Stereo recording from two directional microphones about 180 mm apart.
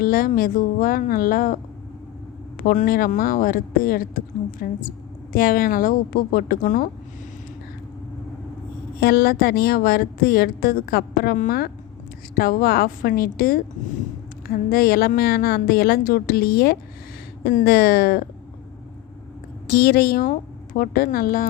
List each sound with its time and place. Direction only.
0.0 s a woman's voice: 55° left (ahead or behind)
2.6 s a woman's voice: 50° left (ahead or behind)
9.0 s a woman's voice: 60° left (ahead or behind)
19.6 s a woman's voice: 60° left (ahead or behind)